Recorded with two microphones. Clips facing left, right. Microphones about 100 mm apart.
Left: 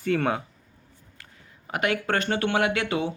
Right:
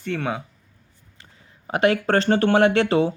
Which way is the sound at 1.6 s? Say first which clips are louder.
Right 6 dB; 30° right (ahead or behind).